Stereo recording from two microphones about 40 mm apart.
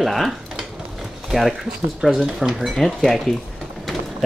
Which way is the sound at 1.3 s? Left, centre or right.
Centre.